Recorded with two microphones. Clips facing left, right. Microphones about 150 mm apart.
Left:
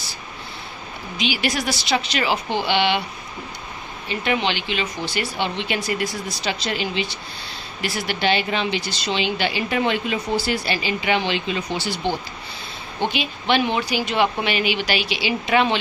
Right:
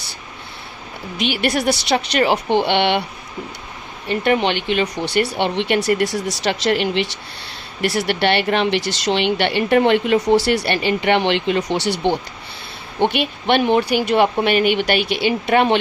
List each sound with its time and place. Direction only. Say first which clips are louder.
1.2 s speech: right 5 dB; 60° right (ahead or behind)
4.1 s speech: right 5 dB; 55° right (ahead or behind)
13.1 s speech: right 2 dB; 60° right (ahead or behind)